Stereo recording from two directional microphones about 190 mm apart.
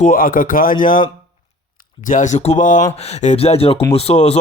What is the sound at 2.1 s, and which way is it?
Speech, 40° left (ahead or behind).